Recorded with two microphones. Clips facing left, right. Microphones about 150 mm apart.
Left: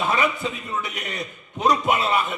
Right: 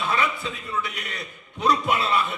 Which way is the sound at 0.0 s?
20° left (ahead or behind).